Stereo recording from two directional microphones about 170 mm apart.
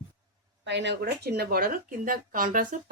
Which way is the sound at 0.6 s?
90° right.